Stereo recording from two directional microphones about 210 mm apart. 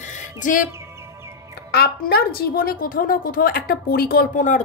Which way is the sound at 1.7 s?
50° left (ahead or behind).